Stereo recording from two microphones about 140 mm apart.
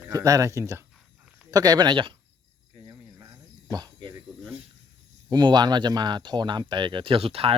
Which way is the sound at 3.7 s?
30° right (ahead or behind).